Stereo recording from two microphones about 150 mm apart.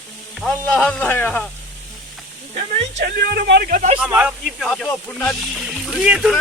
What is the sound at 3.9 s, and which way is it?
Speech, 10° right (ahead or behind).